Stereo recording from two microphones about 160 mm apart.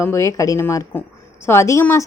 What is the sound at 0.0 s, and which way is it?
A woman's voice, 15° left (ahead or behind).